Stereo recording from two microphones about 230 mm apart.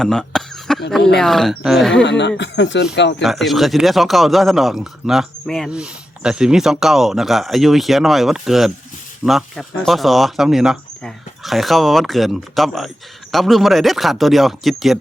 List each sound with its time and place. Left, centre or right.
0.0 s cough: centre
0.9 s a man's voice: centre
2.0 s speech: left
3.2 s a man's voice: centre